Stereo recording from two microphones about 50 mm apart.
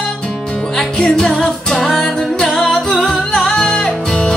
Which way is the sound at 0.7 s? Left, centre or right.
Centre.